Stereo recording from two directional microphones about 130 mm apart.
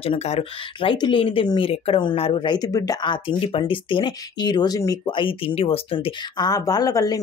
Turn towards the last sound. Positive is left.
turn(degrees=30)  # may be behind; listen again after turning